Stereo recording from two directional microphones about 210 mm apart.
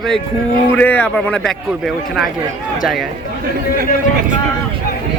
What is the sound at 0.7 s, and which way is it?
Speech, 10° left (ahead or behind).